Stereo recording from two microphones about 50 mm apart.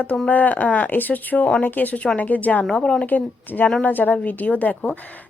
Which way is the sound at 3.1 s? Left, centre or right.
Left.